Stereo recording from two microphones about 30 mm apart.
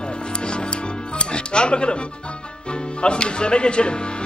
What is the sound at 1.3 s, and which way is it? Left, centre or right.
Speech, left.